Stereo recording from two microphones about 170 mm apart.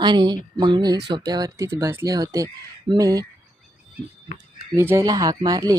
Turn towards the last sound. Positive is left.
turn(degrees=-20)  # may be behind; listen again after turning